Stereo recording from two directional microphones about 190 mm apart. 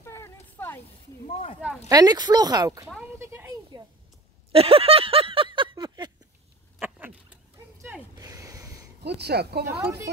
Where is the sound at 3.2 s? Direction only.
15° right (ahead or behind).